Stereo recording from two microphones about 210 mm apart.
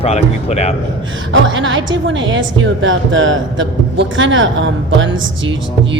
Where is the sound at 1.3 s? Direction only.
65° right (ahead or behind).